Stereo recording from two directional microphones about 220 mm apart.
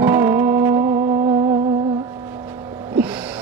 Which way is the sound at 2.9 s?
5° right (ahead or behind).